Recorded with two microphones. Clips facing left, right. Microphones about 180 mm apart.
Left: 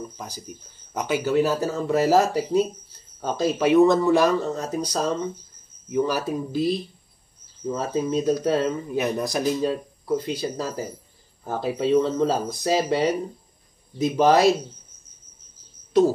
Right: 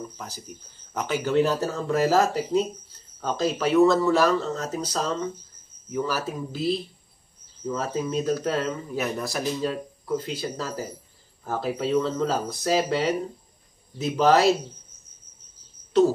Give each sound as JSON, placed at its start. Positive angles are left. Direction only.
{"t": 0.9, "sound": "speech", "side_deg": 10}